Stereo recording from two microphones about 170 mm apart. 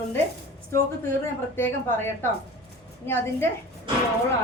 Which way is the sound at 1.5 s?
15° left (ahead or behind).